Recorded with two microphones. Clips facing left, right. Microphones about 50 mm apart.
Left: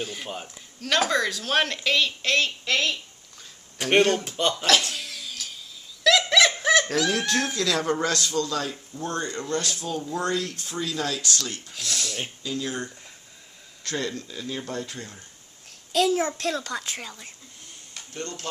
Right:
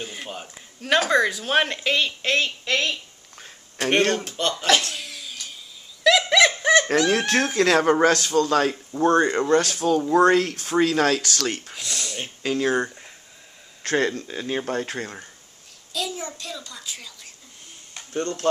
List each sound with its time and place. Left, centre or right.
0.0 s speech: centre
3.9 s speech: centre
4.6 s a sound: centre
6.0 s bird: centre
7.1 s speech: right
11.7 s speech: centre
12.4 s speech: right
13.8 s speech: right
15.9 s a child's voice: left
16.9 s speech: left
18.1 s speech: right